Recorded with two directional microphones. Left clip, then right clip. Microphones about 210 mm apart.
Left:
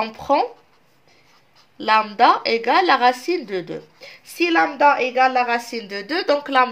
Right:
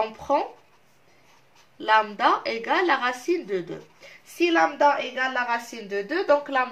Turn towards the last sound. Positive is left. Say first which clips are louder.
# left 4 dB
turn(degrees=55)  # may be behind; listen again after turning